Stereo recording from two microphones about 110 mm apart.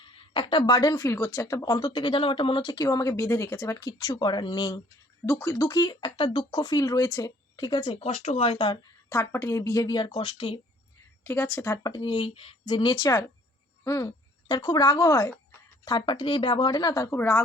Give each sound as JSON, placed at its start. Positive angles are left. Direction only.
{"t": 0.0, "sound": "speech", "side_deg": 50}
{"t": 5.2, "sound": "speech", "side_deg": 25}
{"t": 7.9, "sound": "speech", "side_deg": 70}
{"t": 8.5, "sound": "speech", "side_deg": 45}
{"t": 9.0, "sound": "speech", "side_deg": 25}
{"t": 11.2, "sound": "a woman's voice", "side_deg": 20}
{"t": 11.9, "sound": "speech", "side_deg": 45}
{"t": 15.8, "sound": "speech", "side_deg": 40}
{"t": 17.1, "sound": "a woman's voice", "side_deg": 20}